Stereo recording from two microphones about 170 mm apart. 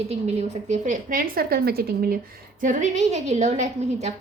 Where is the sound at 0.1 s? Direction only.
40° right (ahead or behind); by 2.1 s 65° right (ahead or behind).